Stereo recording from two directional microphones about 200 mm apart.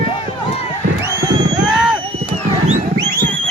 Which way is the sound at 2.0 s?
30° right (ahead or behind).